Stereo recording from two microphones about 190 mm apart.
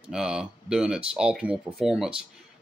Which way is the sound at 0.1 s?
5° right (ahead or behind).